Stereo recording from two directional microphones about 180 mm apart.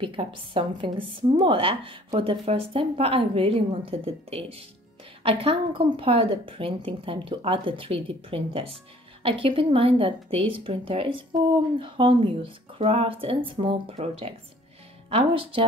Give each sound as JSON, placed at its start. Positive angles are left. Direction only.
{"t": 0.0, "sound": "a woman's voice", "side_deg": -30}